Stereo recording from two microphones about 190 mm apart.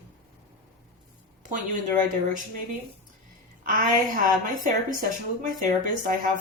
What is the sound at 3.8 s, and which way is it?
Speech, 45° right (ahead or behind).